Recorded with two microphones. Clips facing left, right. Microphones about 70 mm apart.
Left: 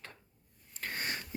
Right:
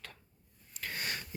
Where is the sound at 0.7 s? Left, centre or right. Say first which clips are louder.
Left 1 dB; left.